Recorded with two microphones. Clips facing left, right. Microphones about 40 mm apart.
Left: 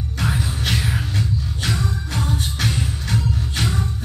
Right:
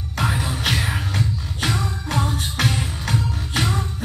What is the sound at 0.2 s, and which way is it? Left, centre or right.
Music, right.